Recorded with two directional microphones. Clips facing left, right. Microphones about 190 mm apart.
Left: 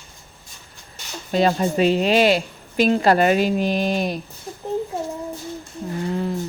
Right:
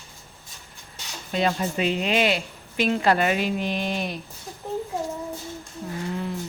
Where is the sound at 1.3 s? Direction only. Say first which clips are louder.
Left 6 dB; 40° left (ahead or behind).